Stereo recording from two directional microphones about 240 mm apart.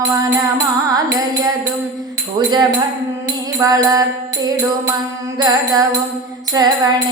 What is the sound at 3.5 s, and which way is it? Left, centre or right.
Music, centre.